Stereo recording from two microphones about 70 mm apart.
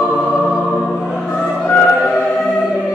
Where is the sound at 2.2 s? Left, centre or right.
Centre.